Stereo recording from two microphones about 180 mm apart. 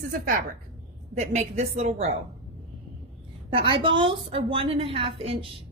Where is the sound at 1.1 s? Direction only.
40° right (ahead or behind).